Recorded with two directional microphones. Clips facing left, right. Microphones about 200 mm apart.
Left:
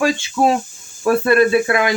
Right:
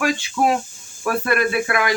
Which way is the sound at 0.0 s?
25° left (ahead or behind).